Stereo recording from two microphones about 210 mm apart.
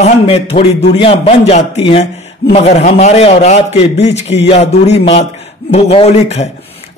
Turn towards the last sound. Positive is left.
turn(degrees=30)  # may be behind; listen again after turning